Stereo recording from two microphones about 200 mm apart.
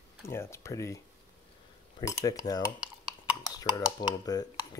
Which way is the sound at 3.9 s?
20° left (ahead or behind).